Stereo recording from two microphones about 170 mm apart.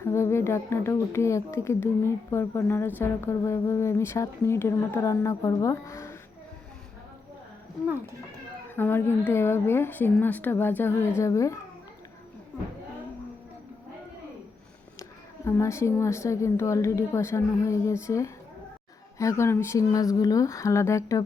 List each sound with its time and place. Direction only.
0.0 s speech: 15° left (ahead or behind)
8.7 s speech: 10° left (ahead or behind)
15.4 s speech: 15° left (ahead or behind)